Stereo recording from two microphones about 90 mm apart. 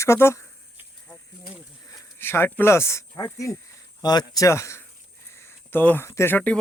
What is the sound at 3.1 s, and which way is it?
Speech, 40° left (ahead or behind).